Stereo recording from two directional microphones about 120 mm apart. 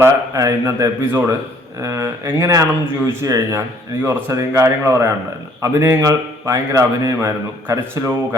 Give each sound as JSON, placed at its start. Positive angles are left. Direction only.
{"t": 0.0, "sound": "a man's voice", "side_deg": -25}